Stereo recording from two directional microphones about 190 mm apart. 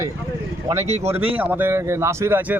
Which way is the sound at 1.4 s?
10° right (ahead or behind).